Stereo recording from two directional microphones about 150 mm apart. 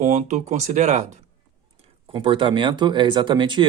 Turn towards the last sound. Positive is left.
turn(degrees=-30)  # may be behind; listen again after turning